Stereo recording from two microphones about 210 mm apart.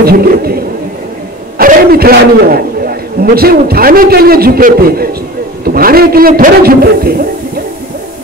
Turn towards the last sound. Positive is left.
turn(degrees=-45)  # may be behind; listen again after turning